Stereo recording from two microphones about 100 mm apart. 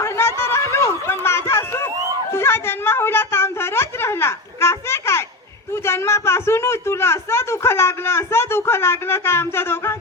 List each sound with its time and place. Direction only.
0.0 s chatter: 25° left (ahead or behind)
2.3 s a sound: 25° left (ahead or behind)
5.7 s speech: 25° left (ahead or behind)